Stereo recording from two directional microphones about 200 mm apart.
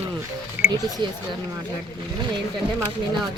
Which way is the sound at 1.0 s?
20° right (ahead or behind).